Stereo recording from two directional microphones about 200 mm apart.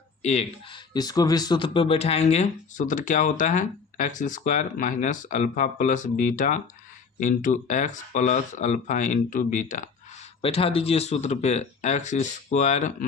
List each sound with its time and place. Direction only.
0.2 s speech: 35° left (ahead or behind)
0.9 s speech: 20° left (ahead or behind); by 9.9 s 40° left (ahead or behind)
10.4 s speech: 30° left (ahead or behind)